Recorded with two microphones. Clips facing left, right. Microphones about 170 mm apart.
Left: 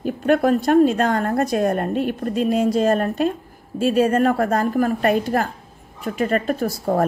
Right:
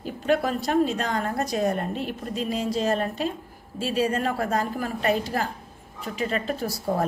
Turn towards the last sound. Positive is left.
turn(degrees=55)  # may be behind; listen again after turning